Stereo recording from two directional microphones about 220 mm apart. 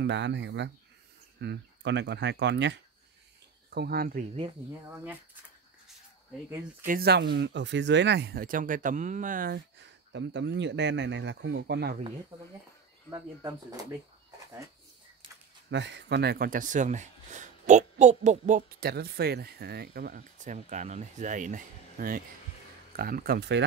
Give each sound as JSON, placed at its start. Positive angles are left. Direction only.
{"t": 0.0, "sound": "speech", "side_deg": -50}
{"t": 6.9, "sound": "speech", "side_deg": -45}
{"t": 13.1, "sound": "speech", "side_deg": -15}
{"t": 15.7, "sound": "speech", "side_deg": -50}